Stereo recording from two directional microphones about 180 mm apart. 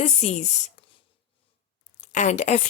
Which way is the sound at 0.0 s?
40° left (ahead or behind).